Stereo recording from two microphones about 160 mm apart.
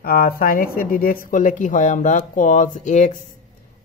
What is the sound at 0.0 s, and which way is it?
Speech, 65° left (ahead or behind).